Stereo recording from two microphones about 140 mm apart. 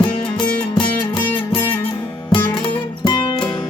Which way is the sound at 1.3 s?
10° left (ahead or behind).